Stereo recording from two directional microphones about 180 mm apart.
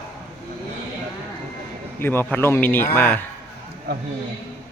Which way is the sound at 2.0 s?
10° left (ahead or behind).